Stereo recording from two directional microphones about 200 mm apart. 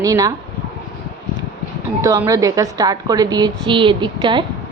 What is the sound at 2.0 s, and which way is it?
A woman's voice, 15° right (ahead or behind).